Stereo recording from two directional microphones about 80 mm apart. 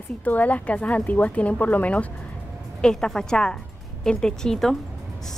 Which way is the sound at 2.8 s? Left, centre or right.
Centre.